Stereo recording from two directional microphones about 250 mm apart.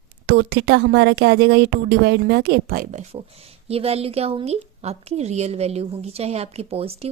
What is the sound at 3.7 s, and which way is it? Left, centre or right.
A woman's voice, right.